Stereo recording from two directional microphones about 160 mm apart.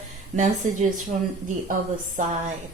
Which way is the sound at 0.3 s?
50° right (ahead or behind).